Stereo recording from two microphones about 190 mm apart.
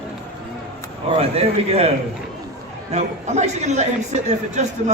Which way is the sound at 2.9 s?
35° right (ahead or behind).